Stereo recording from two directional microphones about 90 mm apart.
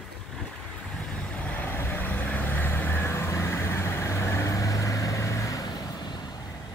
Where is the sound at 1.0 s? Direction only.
10° left (ahead or behind); by 5.7 s 35° left (ahead or behind).